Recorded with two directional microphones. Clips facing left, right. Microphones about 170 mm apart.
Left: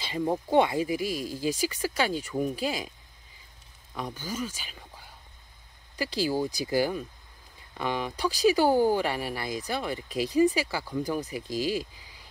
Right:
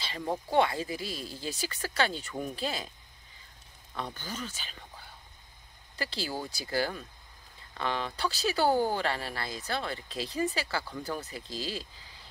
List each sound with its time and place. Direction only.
0.0 s speech: 15° left (ahead or behind)
3.9 s speech: 10° left (ahead or behind)